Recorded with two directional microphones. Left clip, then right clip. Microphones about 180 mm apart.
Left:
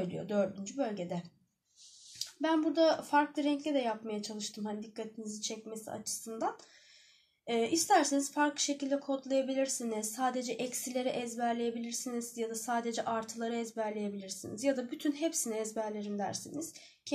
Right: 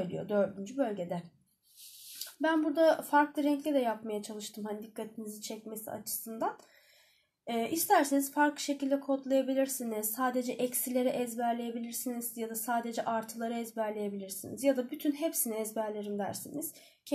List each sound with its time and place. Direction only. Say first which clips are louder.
0.1 s speech: right 5 dB; 25° right (ahead or behind)
2.4 s speech: right 2 dB; 25° right (ahead or behind)